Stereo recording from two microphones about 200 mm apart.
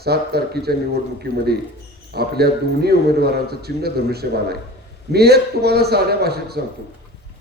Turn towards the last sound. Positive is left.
turn(degrees=-55)  # may be behind; listen again after turning